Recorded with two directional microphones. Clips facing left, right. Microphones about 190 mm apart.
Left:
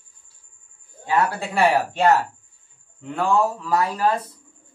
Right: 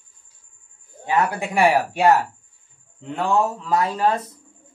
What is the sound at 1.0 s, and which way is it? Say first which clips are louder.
Speech: even; 15° right (ahead or behind).